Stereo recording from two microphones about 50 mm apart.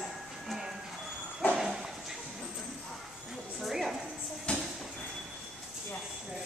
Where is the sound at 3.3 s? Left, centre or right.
Centre.